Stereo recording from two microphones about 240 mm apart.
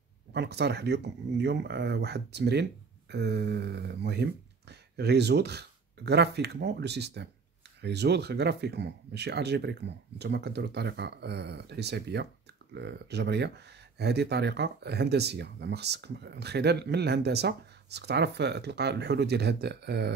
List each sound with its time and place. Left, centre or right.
0.3 s speech: right